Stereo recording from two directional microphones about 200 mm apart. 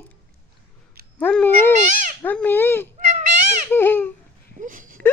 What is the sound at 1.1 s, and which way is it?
Dog, 10° left (ahead or behind).